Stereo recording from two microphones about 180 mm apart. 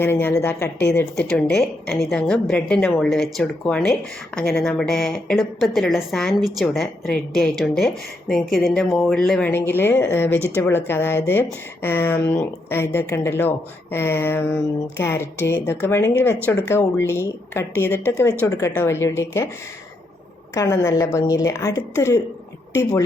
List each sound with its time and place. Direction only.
0.0 s a woman's voice: 10° left (ahead or behind)
20.5 s a woman's voice: 15° left (ahead or behind)